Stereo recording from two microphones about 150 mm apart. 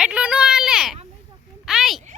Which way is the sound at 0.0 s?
5° right (ahead or behind).